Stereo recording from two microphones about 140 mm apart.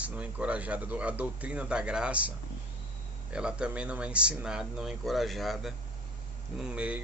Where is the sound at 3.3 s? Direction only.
5° right (ahead or behind).